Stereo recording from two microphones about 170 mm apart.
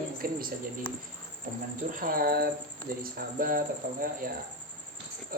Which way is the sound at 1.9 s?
55° right (ahead or behind).